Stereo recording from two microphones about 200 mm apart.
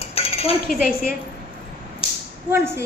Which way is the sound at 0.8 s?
45° left (ahead or behind).